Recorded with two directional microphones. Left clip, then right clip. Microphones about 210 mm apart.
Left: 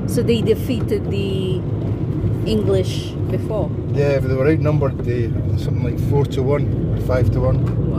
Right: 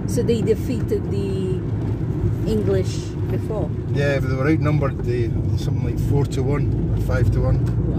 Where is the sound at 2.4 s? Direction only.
20° left (ahead or behind).